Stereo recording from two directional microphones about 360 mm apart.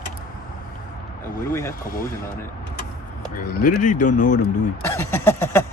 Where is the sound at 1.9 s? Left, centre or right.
Left.